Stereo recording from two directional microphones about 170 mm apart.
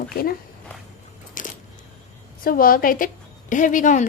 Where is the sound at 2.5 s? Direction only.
55° left (ahead or behind).